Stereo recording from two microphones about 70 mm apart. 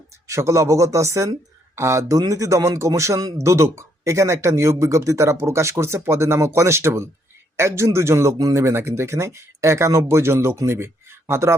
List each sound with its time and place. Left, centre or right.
0.3 s speech: right